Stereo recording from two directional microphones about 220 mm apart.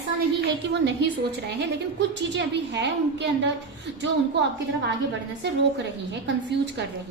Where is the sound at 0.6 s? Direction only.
50° right (ahead or behind).